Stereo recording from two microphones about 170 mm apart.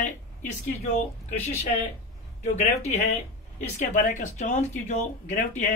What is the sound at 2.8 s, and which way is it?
Speech, 40° left (ahead or behind).